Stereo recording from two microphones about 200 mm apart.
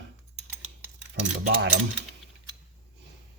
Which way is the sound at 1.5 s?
60° right (ahead or behind).